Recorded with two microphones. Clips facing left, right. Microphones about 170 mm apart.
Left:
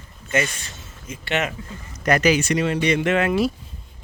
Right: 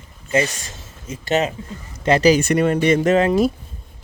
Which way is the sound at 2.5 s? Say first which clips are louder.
Right 4 dB; 50° right (ahead or behind).